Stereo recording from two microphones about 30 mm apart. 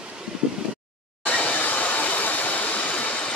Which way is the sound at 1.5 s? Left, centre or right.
Left.